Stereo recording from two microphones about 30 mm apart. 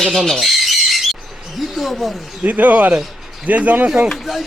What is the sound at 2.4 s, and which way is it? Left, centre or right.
Speech, right.